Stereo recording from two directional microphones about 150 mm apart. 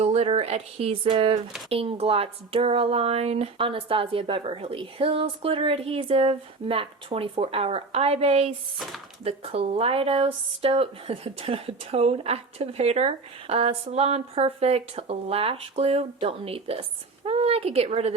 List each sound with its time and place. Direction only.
0.0 s speech: 45° right (ahead or behind)